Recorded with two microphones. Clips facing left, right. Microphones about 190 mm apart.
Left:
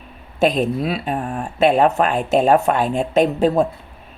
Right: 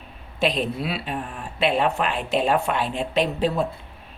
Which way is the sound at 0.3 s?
45° left (ahead or behind).